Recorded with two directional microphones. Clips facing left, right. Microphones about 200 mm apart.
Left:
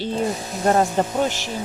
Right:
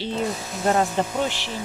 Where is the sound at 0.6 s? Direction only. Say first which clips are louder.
Left 3 dB; 45° left (ahead or behind).